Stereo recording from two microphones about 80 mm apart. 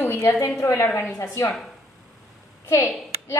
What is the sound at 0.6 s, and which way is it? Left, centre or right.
Speech, left.